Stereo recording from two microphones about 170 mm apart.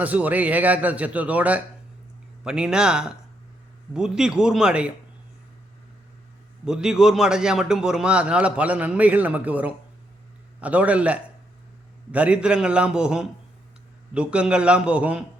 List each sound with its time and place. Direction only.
0.0 s a man's voice: 10° right (ahead or behind)
6.7 s a man's voice: 5° right (ahead or behind)